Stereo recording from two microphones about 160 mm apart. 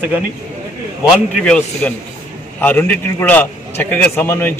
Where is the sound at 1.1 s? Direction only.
5° left (ahead or behind).